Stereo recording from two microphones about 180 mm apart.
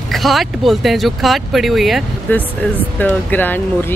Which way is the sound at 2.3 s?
10° left (ahead or behind).